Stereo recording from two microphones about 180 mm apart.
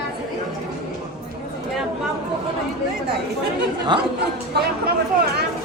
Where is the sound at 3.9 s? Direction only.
25° right (ahead or behind).